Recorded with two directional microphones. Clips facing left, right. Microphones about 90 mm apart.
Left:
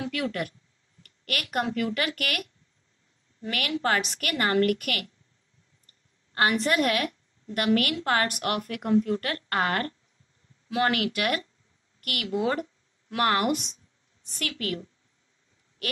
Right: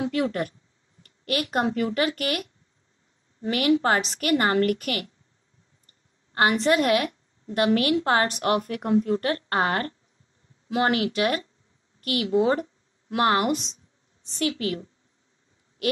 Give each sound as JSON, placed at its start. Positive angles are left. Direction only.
{"t": 0.0, "sound": "a woman's voice", "side_deg": -30}
{"t": 6.3, "sound": "a woman's voice", "side_deg": -30}